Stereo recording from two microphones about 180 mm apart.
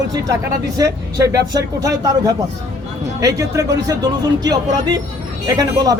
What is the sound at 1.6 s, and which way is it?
Speech, 20° right (ahead or behind).